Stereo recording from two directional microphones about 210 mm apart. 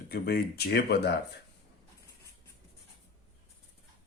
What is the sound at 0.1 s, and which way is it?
Speech, 50° left (ahead or behind).